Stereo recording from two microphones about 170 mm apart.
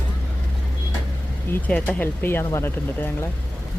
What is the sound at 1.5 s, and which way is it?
Speech, 10° left (ahead or behind).